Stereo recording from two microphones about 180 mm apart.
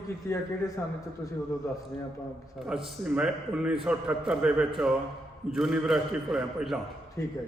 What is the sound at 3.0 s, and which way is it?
A man's voice, 5° right (ahead or behind).